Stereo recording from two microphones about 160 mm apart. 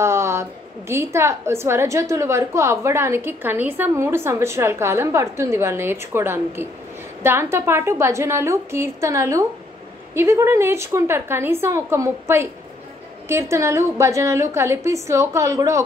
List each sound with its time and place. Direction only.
0.0 s a woman's voice: 15° right (ahead or behind)